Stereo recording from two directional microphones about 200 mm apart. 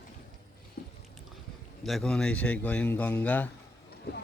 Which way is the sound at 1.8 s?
Centre (ahead or behind).